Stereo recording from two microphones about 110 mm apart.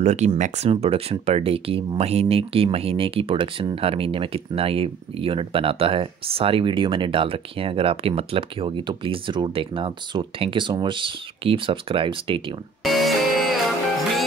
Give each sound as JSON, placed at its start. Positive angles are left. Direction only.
{"t": 0.0, "sound": "speech", "side_deg": -90}
{"t": 0.4, "sound": "speech", "side_deg": -70}
{"t": 12.8, "sound": "music", "side_deg": 0}